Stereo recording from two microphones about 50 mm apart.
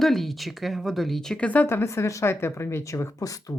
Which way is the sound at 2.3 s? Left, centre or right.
Left.